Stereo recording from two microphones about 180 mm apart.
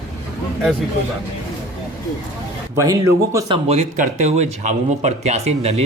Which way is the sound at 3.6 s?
40° right (ahead or behind).